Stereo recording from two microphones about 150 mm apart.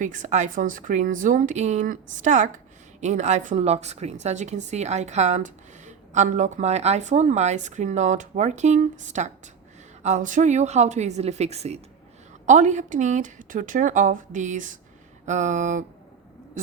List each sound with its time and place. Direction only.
0.0 s a woman's voice: 55° right (ahead or behind)